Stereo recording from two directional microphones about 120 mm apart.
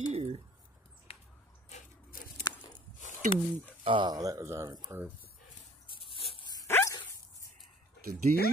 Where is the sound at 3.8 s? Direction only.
45° right (ahead or behind); by 5.1 s 15° right (ahead or behind).